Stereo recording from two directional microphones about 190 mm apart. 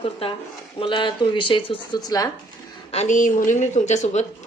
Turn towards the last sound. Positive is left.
turn(degrees=35)  # may be behind; listen again after turning